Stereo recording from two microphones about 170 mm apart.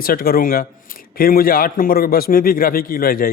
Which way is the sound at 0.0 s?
60° left (ahead or behind).